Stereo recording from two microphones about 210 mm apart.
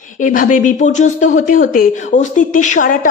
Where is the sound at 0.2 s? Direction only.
40° left (ahead or behind).